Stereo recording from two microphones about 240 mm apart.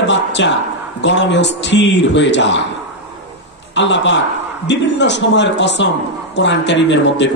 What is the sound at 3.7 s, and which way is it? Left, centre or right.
A man's voice, left.